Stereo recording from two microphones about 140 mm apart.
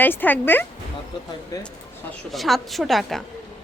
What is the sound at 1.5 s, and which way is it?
Speech, 25° left (ahead or behind).